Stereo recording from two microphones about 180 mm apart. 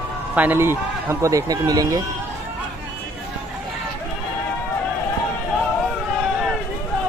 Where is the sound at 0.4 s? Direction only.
10° right (ahead or behind).